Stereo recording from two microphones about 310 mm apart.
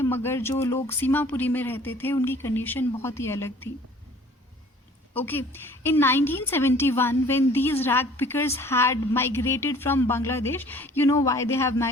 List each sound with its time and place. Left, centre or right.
0.0 s a woman's voice: centre
5.1 s a woman's voice: centre